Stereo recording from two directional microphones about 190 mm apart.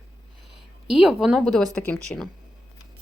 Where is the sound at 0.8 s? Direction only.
5° right (ahead or behind).